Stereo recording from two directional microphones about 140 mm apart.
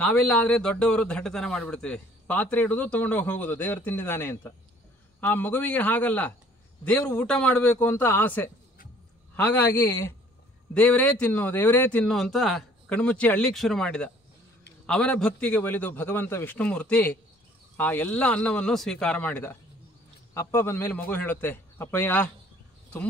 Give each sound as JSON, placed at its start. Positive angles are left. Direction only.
{"t": 0.0, "sound": "a man's voice", "side_deg": 5}